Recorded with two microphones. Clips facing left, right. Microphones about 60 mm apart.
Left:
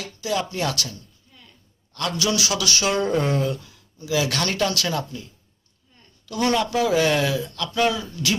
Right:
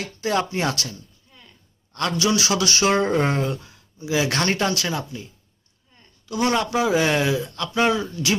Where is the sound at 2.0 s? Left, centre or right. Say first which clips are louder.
Right 2 dB; right.